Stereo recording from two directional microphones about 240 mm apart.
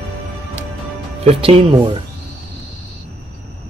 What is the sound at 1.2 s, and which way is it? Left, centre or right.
Speech, right.